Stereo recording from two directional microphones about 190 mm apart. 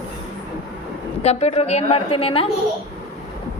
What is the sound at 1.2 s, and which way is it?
A woman's voice, 35° left (ahead or behind).